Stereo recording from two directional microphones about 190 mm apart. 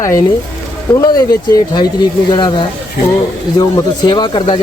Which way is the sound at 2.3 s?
25° left (ahead or behind).